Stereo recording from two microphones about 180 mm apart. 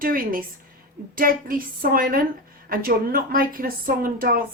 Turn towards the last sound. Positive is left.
turn(degrees=-55)  # may be behind; listen again after turning